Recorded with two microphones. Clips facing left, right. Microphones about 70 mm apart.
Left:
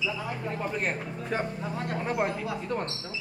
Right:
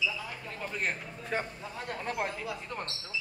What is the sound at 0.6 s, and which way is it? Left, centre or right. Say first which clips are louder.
Speech: left 2 dB; centre.